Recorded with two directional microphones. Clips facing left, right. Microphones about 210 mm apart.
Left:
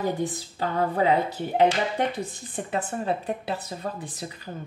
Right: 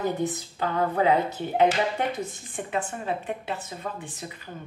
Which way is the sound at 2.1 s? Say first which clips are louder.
Left 1 dB; 35° left (ahead or behind).